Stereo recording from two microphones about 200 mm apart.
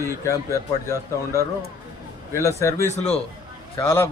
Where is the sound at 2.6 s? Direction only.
15° left (ahead or behind).